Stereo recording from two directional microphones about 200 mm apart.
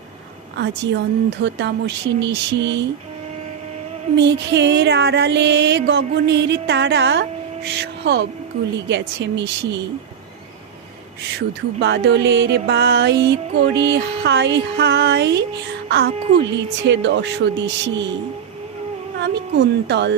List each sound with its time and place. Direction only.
0.5 s music: 60° right (ahead or behind)
4.2 s music: 60° right (ahead or behind)
11.3 s music: 55° right (ahead or behind)
19.2 s music: 60° right (ahead or behind)